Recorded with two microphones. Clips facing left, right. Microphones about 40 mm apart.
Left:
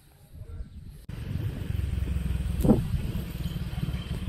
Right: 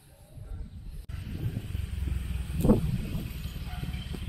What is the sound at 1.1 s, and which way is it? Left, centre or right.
Vehicle, centre.